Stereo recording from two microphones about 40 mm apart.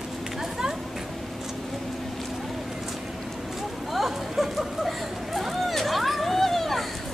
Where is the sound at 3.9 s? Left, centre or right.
Centre.